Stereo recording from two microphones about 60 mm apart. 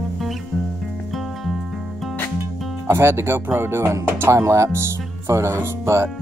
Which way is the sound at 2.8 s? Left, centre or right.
Right.